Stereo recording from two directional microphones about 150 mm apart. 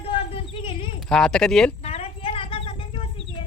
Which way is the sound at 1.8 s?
40° left (ahead or behind).